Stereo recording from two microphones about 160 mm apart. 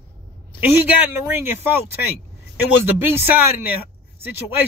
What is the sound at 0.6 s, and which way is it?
A man's voice, 10° right (ahead or behind).